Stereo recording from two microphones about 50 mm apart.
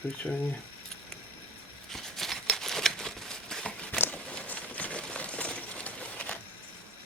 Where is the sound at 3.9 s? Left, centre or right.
Left.